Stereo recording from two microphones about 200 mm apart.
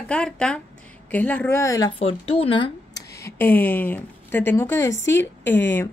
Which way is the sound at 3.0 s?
55° left (ahead or behind).